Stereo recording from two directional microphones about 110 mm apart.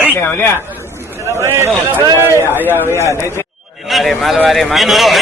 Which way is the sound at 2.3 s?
20° left (ahead or behind).